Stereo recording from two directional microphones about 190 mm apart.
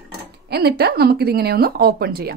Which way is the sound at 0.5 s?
60° right (ahead or behind).